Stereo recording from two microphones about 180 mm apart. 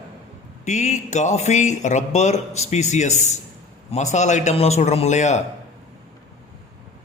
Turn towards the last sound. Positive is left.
turn(degrees=40)  # may be behind; listen again after turning